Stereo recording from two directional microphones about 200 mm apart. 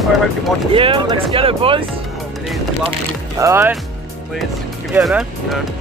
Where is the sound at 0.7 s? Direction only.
25° right (ahead or behind).